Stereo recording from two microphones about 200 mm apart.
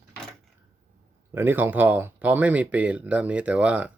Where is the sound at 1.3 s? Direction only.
10° right (ahead or behind).